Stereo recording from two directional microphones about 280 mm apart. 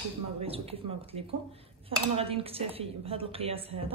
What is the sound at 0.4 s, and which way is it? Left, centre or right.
A woman's voice, centre.